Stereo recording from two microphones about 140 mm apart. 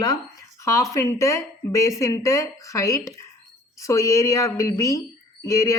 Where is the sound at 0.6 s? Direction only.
20° left (ahead or behind).